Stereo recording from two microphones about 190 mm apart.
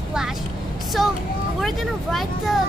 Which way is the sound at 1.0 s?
Centre (ahead or behind).